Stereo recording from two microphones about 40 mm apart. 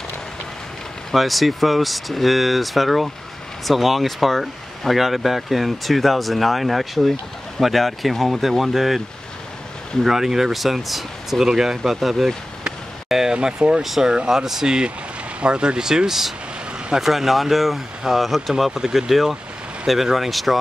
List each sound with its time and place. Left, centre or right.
1.1 s speech: centre
10.0 s speech: centre
11.4 s speech: centre
13.3 s speech: centre